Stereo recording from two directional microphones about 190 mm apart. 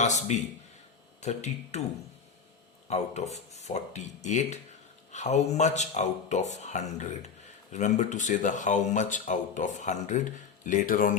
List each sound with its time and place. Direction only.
0.0 s speech: 40° left (ahead or behind)
2.9 s speech: 35° left (ahead or behind)